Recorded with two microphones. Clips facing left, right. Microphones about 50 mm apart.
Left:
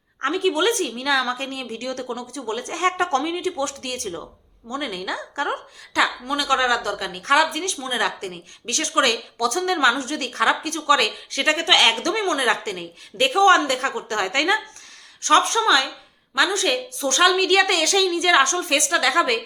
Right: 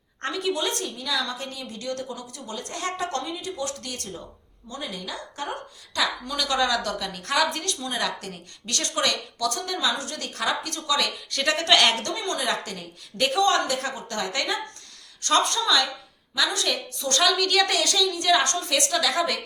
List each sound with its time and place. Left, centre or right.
0.2 s a woman's voice: left
0.5 s a woman's voice: left
5.9 s a woman's voice: left
6.6 s a woman's voice: left
7.6 s a woman's voice: left
11.3 s a woman's voice: left
12.2 s a woman's voice: left
15.4 s a woman's voice: left
17.7 s speech: left